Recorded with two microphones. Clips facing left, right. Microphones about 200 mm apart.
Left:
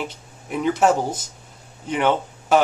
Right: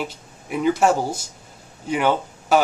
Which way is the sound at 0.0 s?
5° right (ahead or behind).